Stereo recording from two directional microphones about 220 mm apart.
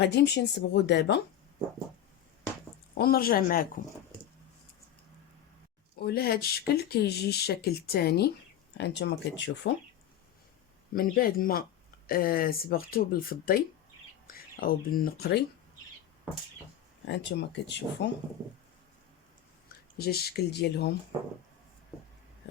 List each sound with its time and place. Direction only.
0.0 s speech: 50° left (ahead or behind)
3.0 s speech: 45° left (ahead or behind)
6.0 s speech: 45° left (ahead or behind)
10.9 s speech: 40° left (ahead or behind)
17.1 s speech: 50° left (ahead or behind)
20.0 s speech: 45° left (ahead or behind)